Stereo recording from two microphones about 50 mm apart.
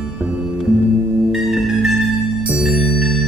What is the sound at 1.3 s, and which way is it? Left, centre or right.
Music, centre.